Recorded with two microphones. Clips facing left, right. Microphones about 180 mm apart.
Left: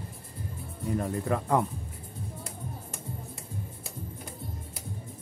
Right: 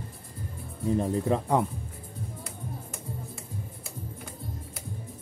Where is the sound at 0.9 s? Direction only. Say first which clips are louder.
Right 3 dB; 20° right (ahead or behind).